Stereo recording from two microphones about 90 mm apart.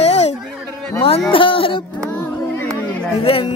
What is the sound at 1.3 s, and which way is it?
Music, 80° left.